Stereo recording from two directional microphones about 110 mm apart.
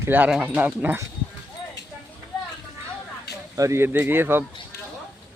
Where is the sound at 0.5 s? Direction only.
15° right (ahead or behind).